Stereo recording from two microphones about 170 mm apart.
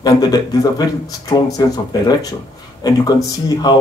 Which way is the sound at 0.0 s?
25° left (ahead or behind).